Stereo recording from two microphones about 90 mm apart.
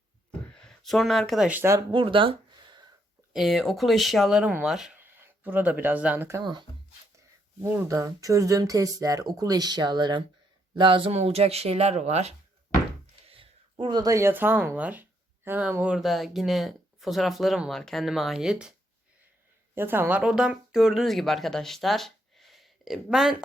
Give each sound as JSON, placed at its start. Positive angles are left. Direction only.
{"t": 0.3, "sound": "a sound", "side_deg": 10}
{"t": 1.9, "sound": "a sound", "side_deg": -70}
{"t": 3.3, "sound": "speech", "side_deg": -5}
{"t": 4.9, "sound": "a sound", "side_deg": -20}
{"t": 6.4, "sound": "speech", "side_deg": -55}
{"t": 7.6, "sound": "speech", "side_deg": -25}
{"t": 7.9, "sound": "speech", "side_deg": -35}
{"t": 10.8, "sound": "speech", "side_deg": -70}
{"t": 13.2, "sound": "a sound", "side_deg": -90}
{"t": 13.9, "sound": "speech", "side_deg": -45}
{"t": 14.2, "sound": "speech", "side_deg": -25}
{"t": 16.0, "sound": "speech", "side_deg": 0}
{"t": 19.7, "sound": "speech", "side_deg": -25}